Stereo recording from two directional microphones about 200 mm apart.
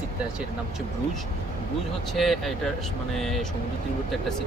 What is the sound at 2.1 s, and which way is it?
Speech, centre (ahead or behind).